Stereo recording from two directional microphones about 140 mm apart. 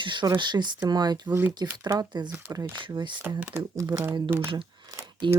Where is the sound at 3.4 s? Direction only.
15° right (ahead or behind).